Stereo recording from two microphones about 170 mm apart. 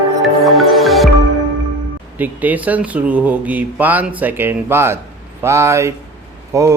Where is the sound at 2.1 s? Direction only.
10° right (ahead or behind).